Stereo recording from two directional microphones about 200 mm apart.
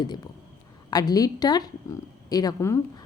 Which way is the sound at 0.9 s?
20° left (ahead or behind).